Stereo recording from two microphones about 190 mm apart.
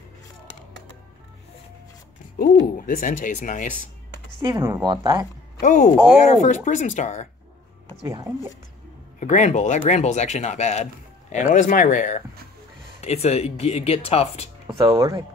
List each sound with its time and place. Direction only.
2.3 s speech: 50° left (ahead or behind)
4.4 s speech: 15° right (ahead or behind)
5.6 s speech: 40° left (ahead or behind)
9.2 s speech: 40° left (ahead or behind)
14.8 s speech: 15° right (ahead or behind)